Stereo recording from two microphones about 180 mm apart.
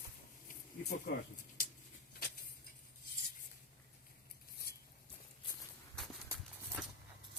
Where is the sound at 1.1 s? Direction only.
60° left (ahead or behind).